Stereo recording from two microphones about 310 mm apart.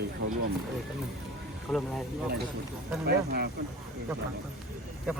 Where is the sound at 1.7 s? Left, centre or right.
Centre.